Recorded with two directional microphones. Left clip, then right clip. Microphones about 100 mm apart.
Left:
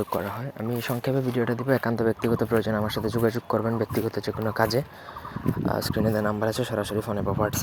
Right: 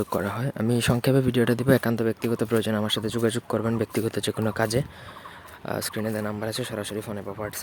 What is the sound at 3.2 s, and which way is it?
Speech, 90° right.